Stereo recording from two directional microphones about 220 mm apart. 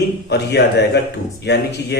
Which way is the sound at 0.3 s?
50° left (ahead or behind).